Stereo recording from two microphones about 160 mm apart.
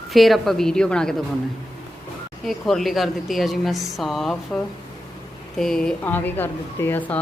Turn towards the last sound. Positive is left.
turn(degrees=10)  # may be behind; listen again after turning